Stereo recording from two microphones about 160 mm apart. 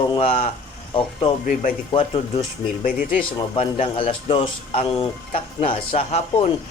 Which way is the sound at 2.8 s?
60° left (ahead or behind).